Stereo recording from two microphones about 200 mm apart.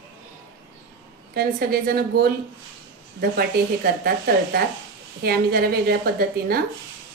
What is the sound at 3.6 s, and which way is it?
Speech, 50° right (ahead or behind).